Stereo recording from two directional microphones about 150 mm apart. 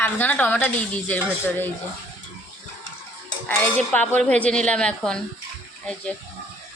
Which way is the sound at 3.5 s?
10° left (ahead or behind).